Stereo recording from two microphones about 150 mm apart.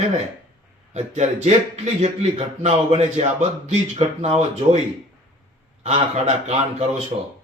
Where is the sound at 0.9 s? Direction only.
50° right (ahead or behind).